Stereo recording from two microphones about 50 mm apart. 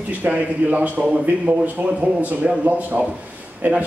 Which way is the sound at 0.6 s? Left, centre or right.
Right.